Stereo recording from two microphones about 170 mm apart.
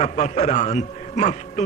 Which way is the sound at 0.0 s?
45° left (ahead or behind).